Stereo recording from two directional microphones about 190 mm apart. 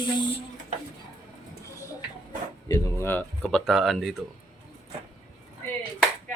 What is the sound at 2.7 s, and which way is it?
Speech, 15° left (ahead or behind).